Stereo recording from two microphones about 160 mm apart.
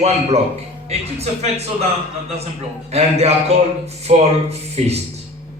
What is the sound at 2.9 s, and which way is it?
A man's voice, 40° right (ahead or behind).